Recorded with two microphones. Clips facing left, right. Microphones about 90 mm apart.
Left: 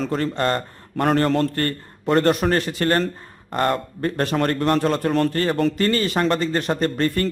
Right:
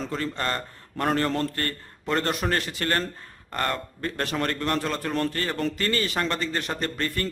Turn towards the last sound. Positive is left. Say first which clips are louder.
# left 8 dB
turn(degrees=35)  # may be behind; listen again after turning